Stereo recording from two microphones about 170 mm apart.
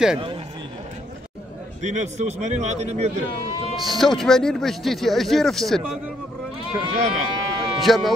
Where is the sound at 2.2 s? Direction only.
40° right (ahead or behind).